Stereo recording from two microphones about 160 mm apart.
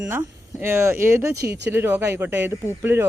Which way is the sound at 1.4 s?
90° right.